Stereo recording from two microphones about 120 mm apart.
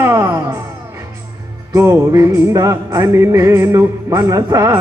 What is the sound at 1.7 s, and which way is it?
Music, 25° right (ahead or behind).